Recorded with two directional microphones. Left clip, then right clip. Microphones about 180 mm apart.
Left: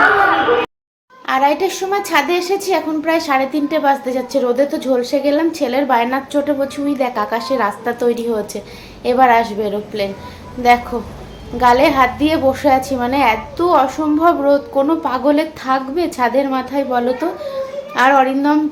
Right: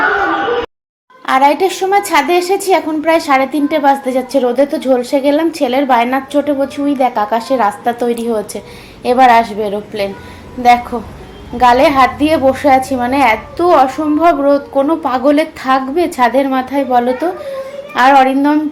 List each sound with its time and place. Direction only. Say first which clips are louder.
1.3 s a woman's voice: right 4 dB; 20° right (ahead or behind)
11.5 s a woman's voice: right 3 dB; 15° right (ahead or behind)